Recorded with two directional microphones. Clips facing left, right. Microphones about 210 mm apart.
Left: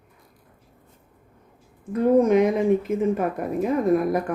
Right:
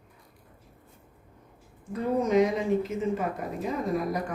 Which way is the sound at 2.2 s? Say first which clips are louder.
Left 5 dB; 55° left (ahead or behind).